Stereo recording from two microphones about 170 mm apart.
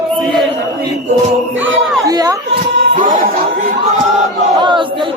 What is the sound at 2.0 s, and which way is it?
Speech, 20° right (ahead or behind).